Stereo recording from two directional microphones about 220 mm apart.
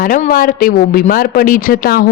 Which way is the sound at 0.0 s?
40° left (ahead or behind).